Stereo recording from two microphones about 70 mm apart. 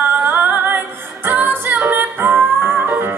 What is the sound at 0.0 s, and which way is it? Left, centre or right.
Music, right.